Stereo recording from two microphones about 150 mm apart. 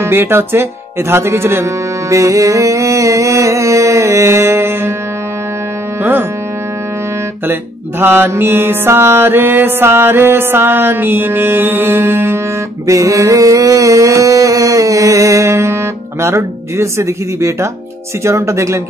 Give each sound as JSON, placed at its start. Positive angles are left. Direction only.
{"t": 0.0, "sound": "music", "side_deg": -15}
{"t": 8.0, "sound": "music", "side_deg": -15}
{"t": 12.8, "sound": "a sound", "side_deg": -20}
{"t": 18.2, "sound": "speech", "side_deg": -20}